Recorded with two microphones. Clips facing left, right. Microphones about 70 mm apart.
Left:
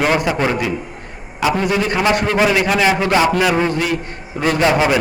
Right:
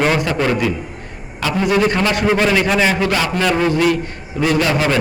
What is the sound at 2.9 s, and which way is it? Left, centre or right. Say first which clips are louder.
A man's voice: left 3 dB; centre.